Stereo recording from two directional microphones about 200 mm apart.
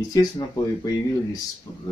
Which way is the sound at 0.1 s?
20° left (ahead or behind).